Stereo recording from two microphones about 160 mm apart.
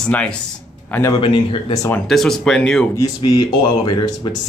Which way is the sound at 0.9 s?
15° left (ahead or behind).